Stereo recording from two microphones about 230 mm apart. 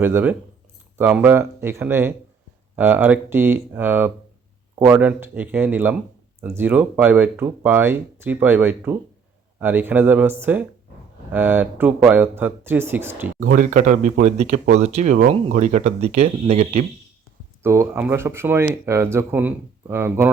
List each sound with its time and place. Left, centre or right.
0.0 s speech: centre
13.6 s speech: right
17.6 s speech: centre